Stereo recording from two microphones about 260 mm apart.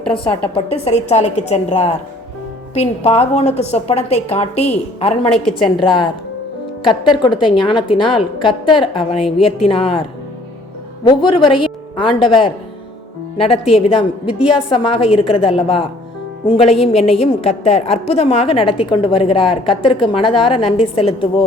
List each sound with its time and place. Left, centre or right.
0.3 s a woman's voice: left
7.1 s a woman's voice: centre